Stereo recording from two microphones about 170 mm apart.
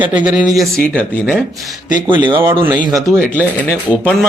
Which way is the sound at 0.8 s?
5° left (ahead or behind).